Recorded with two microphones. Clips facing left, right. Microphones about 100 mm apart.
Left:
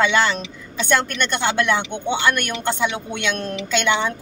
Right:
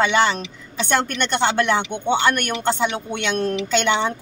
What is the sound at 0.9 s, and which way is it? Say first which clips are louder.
Speech: even; 30° right (ahead or behind).